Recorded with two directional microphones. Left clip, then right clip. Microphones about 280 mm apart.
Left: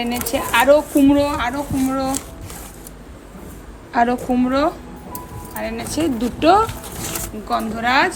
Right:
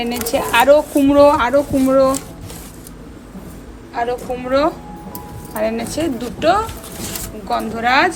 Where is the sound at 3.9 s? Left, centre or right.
Centre.